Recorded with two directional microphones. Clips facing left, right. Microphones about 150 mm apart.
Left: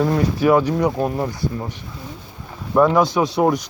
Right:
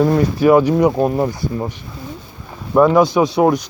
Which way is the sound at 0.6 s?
15° right (ahead or behind).